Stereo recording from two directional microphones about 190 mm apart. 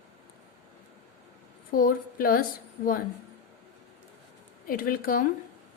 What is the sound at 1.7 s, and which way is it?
Speech, 50° left (ahead or behind).